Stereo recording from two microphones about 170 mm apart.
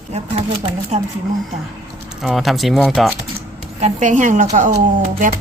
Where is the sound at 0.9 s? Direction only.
40° right (ahead or behind).